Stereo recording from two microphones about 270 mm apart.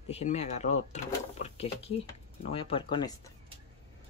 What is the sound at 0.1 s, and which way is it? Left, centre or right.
Speech, left.